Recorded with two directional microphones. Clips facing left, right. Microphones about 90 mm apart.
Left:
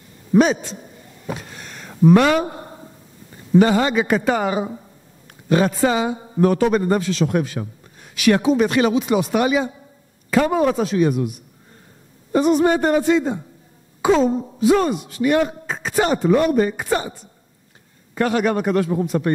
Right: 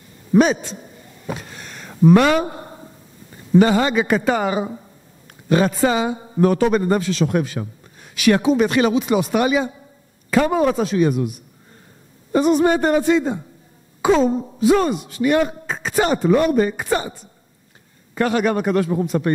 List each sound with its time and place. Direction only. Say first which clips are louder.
0.3 s a man's voice: even; 15° right (ahead or behind)
2.4 s a sound: even; 25° right (ahead or behind)
3.5 s a man's voice: even; 15° right (ahead or behind)
12.4 s a man's voice: even; 15° right (ahead or behind)
14.6 s a man's voice: even; 15° right (ahead or behind)
18.1 s a man's voice: even; 20° right (ahead or behind)